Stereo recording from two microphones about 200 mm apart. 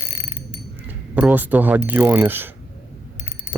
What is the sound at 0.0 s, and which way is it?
Mechanisms, 25° left (ahead or behind).